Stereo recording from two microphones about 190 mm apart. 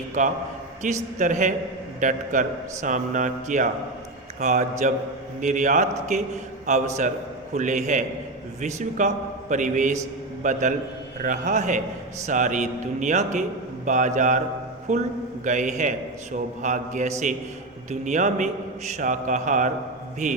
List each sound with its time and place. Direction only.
0.2 s a man's voice: 40° right (ahead or behind)